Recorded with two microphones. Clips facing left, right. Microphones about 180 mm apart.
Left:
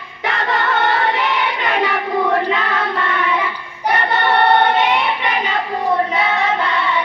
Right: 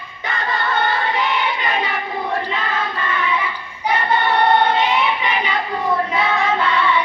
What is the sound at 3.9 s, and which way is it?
Singing, 65° left (ahead or behind).